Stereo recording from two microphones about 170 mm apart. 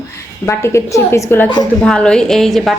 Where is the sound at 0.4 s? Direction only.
15° left (ahead or behind).